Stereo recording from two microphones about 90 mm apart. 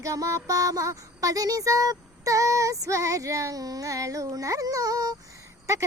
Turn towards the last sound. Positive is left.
turn(degrees=-35)  # may be behind; listen again after turning